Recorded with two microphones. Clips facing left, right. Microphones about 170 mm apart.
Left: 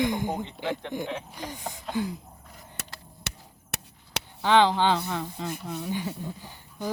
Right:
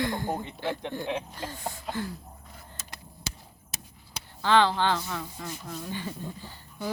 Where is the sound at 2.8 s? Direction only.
70° left (ahead or behind).